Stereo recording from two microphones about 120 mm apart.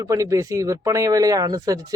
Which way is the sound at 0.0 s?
25° right (ahead or behind).